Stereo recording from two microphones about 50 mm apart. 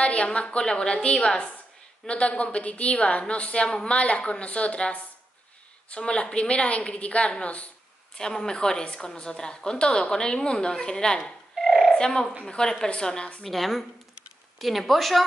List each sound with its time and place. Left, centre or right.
0.0 s a woman's voice: left
8.2 s a woman's voice: centre
11.5 s a sound: centre
11.9 s a woman's voice: centre
13.4 s a woman's voice: centre